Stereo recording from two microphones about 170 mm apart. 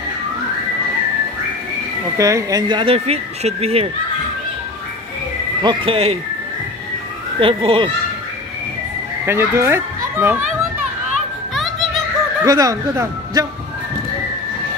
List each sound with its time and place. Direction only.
2.1 s speech: 20° right (ahead or behind); by 3.9 s 35° right (ahead or behind)
5.6 s speech: 30° right (ahead or behind)
7.3 s speech: 30° right (ahead or behind)
9.2 s a child's voice: 15° right (ahead or behind)
11.5 s children playing: centre (ahead or behind)
12.4 s a man's voice: 20° right (ahead or behind)